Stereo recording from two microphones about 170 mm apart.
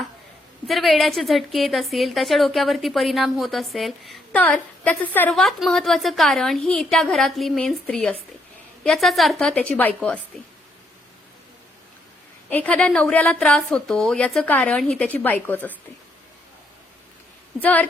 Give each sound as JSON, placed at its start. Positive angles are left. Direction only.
{"t": 0.7, "sound": "a woman's voice", "side_deg": 0}
{"t": 12.5, "sound": "a woman's voice", "side_deg": 10}
{"t": 17.6, "sound": "a woman's voice", "side_deg": 10}